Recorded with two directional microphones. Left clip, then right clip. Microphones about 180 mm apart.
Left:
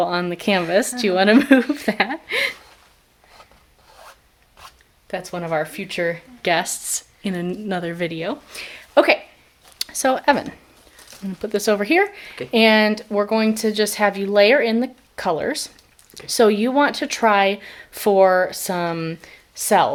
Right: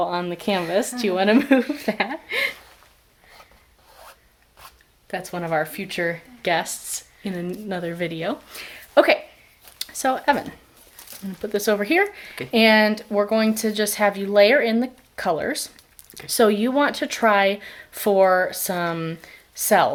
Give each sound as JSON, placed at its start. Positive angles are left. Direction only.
{"t": 0.0, "sound": "speech", "side_deg": 30}
{"t": 4.6, "sound": "speech", "side_deg": 5}
{"t": 6.4, "sound": "speech", "side_deg": 25}
{"t": 9.7, "sound": "speech", "side_deg": 25}